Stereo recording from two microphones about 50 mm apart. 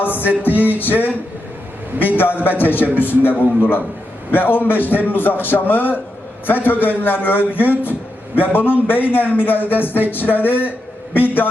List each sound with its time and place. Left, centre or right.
0.0 s music: left
2.1 s a man's voice: left